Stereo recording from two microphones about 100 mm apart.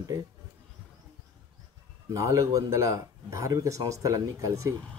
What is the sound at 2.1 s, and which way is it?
Speech, 35° right (ahead or behind).